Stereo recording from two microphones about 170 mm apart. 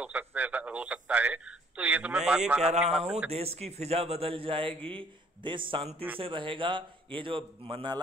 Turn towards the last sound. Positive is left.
turn(degrees=-30)  # may be behind; listen again after turning